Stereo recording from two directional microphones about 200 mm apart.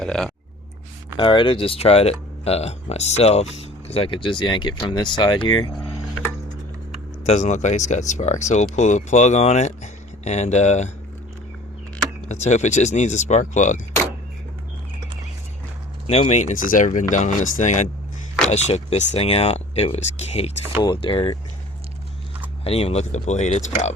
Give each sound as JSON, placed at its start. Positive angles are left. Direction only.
{"t": 0.0, "sound": "a sound", "side_deg": 5}
{"t": 1.1, "sound": "speech", "side_deg": 25}
{"t": 7.3, "sound": "speech", "side_deg": 35}
{"t": 12.3, "sound": "speech", "side_deg": 35}
{"t": 16.0, "sound": "speech", "side_deg": 30}
{"t": 22.6, "sound": "speech", "side_deg": 30}